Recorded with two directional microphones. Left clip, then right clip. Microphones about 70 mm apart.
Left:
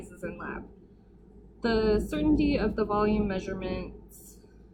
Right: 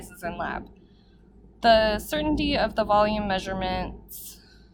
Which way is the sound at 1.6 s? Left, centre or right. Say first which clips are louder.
Right 7 dB; right.